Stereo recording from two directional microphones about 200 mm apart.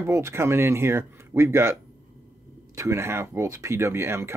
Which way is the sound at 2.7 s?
15° right (ahead or behind).